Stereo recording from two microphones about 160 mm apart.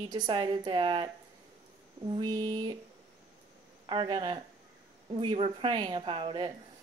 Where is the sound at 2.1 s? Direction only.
30° right (ahead or behind).